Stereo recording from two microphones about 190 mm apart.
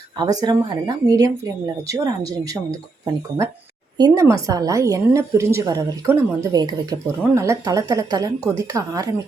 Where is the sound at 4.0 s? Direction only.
15° right (ahead or behind).